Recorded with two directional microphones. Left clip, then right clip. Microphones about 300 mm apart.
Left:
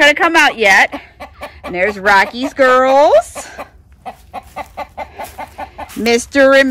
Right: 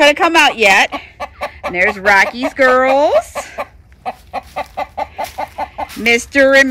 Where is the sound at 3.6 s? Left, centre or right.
Right.